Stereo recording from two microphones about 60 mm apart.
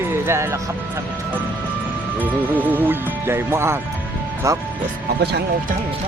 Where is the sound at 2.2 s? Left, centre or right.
Right.